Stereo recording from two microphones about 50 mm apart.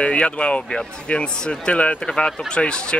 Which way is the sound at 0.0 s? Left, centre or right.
Left.